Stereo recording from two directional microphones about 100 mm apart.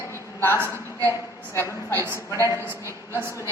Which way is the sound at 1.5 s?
25° left (ahead or behind).